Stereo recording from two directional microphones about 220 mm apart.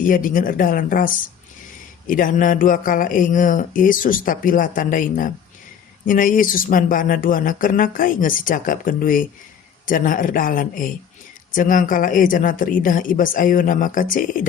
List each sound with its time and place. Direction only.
0.0 s speech: 40° left (ahead or behind)